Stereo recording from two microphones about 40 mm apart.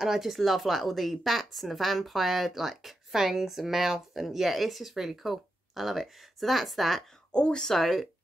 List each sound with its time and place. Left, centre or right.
0.0 s speech: centre
7.3 s speech: left
7.7 s speech: centre